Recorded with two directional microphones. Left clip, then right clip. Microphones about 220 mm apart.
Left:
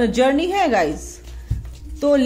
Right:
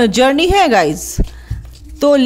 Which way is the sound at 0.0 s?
40° right (ahead or behind).